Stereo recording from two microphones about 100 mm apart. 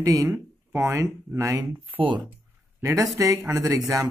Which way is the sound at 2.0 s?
55° right (ahead or behind).